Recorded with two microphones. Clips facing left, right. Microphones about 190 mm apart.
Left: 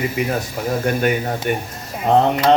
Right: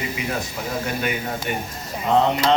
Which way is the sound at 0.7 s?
50° left (ahead or behind).